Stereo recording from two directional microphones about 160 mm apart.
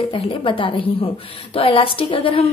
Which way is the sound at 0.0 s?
35° left (ahead or behind).